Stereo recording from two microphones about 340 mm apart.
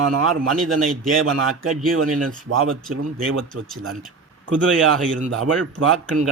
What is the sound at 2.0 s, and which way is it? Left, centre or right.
A man's voice, right.